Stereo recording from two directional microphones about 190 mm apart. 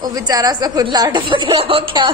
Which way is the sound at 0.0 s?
20° right (ahead or behind).